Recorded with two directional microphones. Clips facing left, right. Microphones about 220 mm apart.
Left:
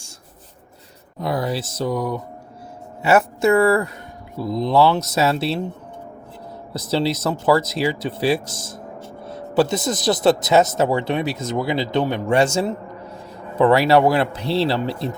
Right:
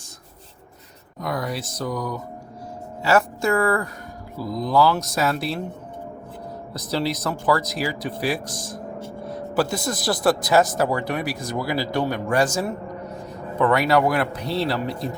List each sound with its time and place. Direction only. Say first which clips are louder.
1.2 s speech: left 4 dB; 30° left (ahead or behind)
6.7 s speech: left 4 dB; 25° left (ahead or behind)